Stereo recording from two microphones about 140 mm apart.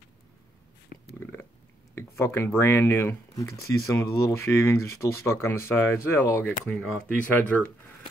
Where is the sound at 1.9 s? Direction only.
15° left (ahead or behind).